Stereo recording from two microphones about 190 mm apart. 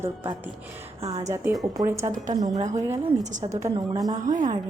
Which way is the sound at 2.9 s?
35° right (ahead or behind).